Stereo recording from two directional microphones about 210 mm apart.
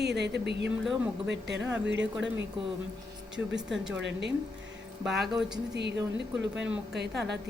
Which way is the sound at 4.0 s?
60° right (ahead or behind).